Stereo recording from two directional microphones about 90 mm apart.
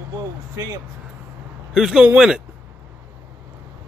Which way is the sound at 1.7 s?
5° right (ahead or behind).